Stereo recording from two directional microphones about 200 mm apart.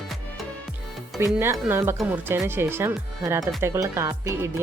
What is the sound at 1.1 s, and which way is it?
Speech, 10° right (ahead or behind).